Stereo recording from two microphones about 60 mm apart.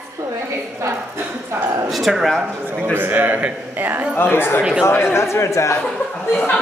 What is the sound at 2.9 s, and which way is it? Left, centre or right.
A man's voice, right.